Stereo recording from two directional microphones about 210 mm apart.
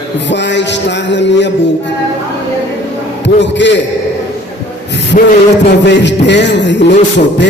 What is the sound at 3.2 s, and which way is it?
Music, 55° left (ahead or behind).